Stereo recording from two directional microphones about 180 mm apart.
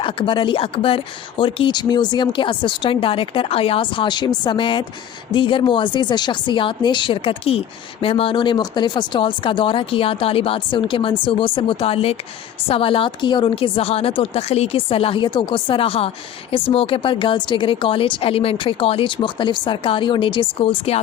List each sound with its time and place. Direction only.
0.0 s a woman's voice: 30° left (ahead or behind)